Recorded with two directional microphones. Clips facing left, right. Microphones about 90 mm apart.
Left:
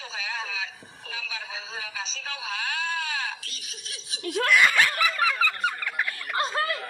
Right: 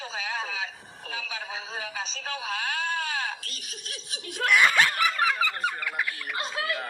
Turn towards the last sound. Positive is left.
turn(degrees=45)  # may be behind; listen again after turning